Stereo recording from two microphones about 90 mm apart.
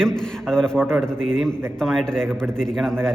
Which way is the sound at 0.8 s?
20° right (ahead or behind).